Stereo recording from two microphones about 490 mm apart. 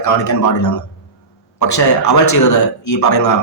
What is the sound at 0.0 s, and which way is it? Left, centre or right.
Speech, left.